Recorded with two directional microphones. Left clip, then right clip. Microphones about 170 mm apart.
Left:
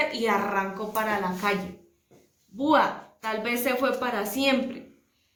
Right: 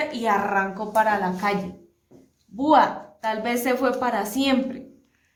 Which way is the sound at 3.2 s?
75° right (ahead or behind).